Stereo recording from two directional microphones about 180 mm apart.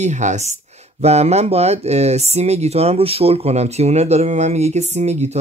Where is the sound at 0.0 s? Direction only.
40° right (ahead or behind).